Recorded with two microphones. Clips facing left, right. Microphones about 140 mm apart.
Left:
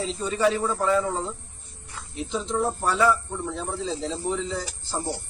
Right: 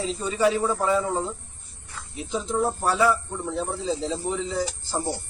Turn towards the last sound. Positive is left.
turn(degrees=-5)  # may be behind; listen again after turning